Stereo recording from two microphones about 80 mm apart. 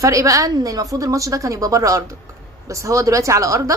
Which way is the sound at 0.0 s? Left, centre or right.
Right.